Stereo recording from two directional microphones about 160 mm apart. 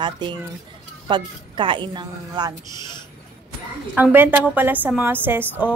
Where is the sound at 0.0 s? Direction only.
30° right (ahead or behind).